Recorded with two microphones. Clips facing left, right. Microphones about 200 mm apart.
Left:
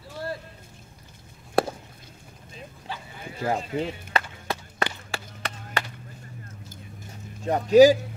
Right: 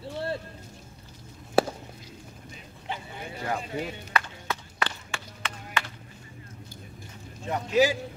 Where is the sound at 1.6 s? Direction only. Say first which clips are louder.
Even; 5° right (ahead or behind).